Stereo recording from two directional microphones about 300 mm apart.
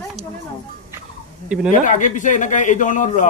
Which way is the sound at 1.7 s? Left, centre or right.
Left.